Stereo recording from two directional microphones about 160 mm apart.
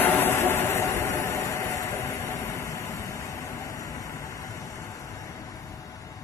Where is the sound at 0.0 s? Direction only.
15° left (ahead or behind).